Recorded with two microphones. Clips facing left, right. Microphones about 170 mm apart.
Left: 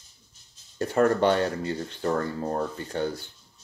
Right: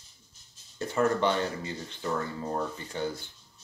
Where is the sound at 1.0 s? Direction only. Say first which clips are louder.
Left 5 dB; 50° left (ahead or behind).